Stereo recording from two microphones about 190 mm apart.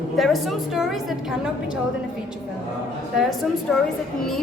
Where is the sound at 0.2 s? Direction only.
Centre (ahead or behind).